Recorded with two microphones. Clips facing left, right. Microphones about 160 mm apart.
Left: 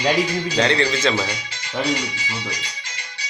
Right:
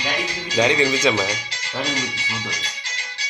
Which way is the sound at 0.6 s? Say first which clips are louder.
Right 2 dB; 10° right (ahead or behind).